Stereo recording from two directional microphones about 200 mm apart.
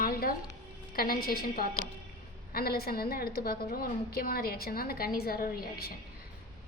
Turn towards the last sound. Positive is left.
turn(degrees=50)  # may be behind; listen again after turning